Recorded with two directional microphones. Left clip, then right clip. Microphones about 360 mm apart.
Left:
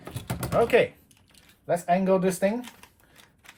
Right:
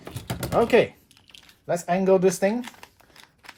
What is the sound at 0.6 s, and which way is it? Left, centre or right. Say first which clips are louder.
Speech: right 2 dB; centre.